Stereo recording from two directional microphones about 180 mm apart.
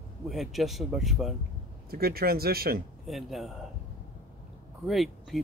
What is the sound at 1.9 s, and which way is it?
Speech, 60° right (ahead or behind).